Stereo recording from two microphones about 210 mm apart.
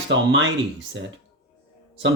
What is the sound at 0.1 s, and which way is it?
Speech, 65° right (ahead or behind).